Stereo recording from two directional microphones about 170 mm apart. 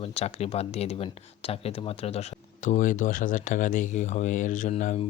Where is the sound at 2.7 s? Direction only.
50° left (ahead or behind).